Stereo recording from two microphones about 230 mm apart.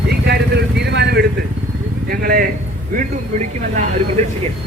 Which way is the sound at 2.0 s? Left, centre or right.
Right.